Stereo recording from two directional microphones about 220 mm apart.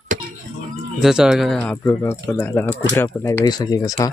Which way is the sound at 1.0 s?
Centre (ahead or behind).